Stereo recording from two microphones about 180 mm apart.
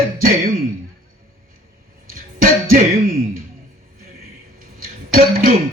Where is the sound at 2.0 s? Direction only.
50° right (ahead or behind).